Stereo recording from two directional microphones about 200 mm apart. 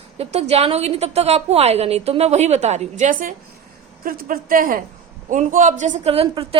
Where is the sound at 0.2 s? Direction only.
30° right (ahead or behind).